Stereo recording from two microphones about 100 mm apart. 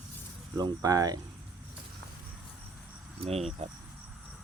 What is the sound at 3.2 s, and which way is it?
Speech, 90° right.